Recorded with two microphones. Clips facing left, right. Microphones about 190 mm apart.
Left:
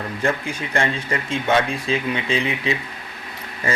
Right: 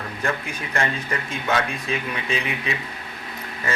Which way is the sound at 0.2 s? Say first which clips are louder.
Left 4 dB; 30° left (ahead or behind).